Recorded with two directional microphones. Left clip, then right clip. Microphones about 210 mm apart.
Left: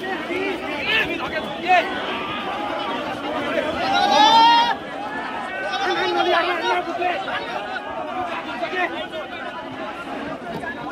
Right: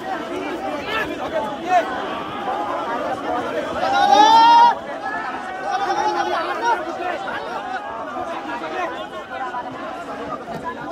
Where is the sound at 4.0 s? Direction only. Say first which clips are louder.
Right 2 dB; 45° right (ahead or behind).